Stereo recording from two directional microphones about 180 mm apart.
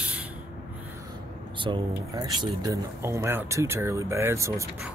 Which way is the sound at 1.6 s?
25° right (ahead or behind).